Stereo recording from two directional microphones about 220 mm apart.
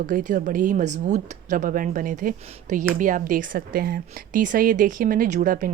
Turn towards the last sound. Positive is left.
turn(degrees=-40)  # may be behind; listen again after turning